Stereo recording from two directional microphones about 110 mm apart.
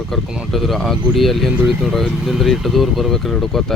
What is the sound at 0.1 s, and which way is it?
Speech, 5° right (ahead or behind).